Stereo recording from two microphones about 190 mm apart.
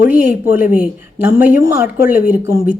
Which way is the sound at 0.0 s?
10° right (ahead or behind).